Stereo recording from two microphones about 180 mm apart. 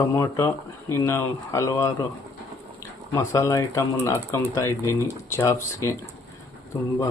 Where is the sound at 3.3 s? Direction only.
15° left (ahead or behind).